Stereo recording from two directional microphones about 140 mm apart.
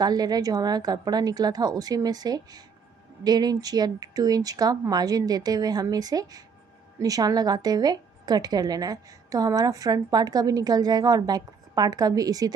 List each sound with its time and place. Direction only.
0.0 s a woman's voice: 30° right (ahead or behind)